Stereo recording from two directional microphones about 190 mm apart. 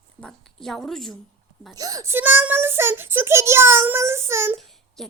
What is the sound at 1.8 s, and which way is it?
A child's voice, 20° right (ahead or behind).